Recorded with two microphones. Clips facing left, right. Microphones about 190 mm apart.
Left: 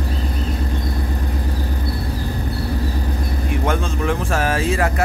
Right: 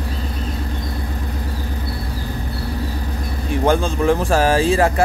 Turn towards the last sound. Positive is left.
turn(degrees=-30)  # may be behind; listen again after turning